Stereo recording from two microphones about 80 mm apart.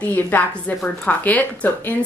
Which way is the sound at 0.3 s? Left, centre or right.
Left.